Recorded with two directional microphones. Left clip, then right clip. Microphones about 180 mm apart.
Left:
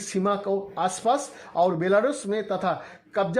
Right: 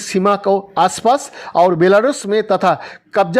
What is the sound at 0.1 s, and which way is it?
Speech, 35° right (ahead or behind).